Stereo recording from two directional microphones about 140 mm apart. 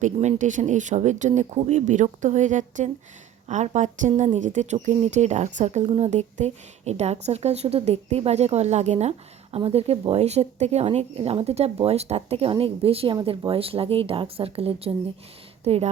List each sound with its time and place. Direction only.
0.0 s a woman's voice: 60° right (ahead or behind)